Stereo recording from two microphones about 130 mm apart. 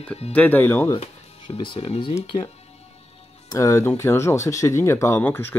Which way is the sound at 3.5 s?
25° left (ahead or behind).